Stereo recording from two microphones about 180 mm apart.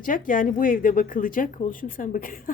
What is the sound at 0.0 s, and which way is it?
Speech, 50° left (ahead or behind).